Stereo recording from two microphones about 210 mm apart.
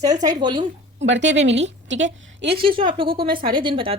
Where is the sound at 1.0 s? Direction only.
60° right (ahead or behind).